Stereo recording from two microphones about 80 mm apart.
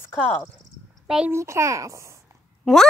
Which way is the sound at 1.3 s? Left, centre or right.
Right.